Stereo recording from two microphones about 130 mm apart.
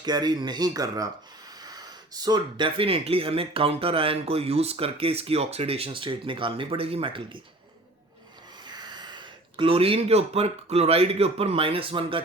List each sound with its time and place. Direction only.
0.0 s speech: 35° right (ahead or behind)
8.6 s speech: 35° right (ahead or behind)